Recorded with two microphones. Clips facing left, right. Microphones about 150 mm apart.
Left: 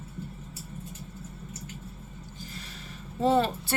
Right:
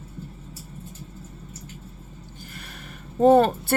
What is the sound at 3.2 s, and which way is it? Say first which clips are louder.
Speech: right 8 dB; 50° right (ahead or behind).